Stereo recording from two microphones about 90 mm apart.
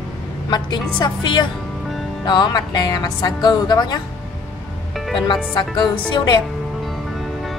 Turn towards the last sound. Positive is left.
turn(degrees=55)  # may be behind; listen again after turning